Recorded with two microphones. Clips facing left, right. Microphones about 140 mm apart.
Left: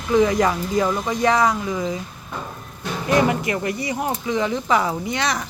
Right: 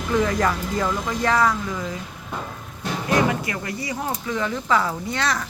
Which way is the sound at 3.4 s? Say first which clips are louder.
Left 5 dB; 25° left (ahead or behind).